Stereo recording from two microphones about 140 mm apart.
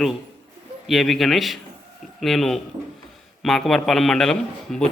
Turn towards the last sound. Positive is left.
turn(degrees=5)  # may be behind; listen again after turning